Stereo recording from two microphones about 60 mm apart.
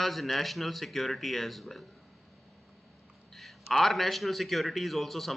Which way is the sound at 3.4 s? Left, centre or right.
Centre.